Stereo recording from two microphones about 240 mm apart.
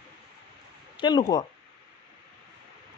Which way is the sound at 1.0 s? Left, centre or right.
Centre.